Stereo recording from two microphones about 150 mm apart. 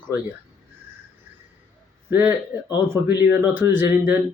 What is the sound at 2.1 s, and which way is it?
A man's voice, 15° right (ahead or behind).